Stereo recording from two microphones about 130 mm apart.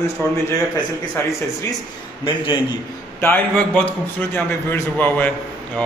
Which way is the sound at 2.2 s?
40° left (ahead or behind).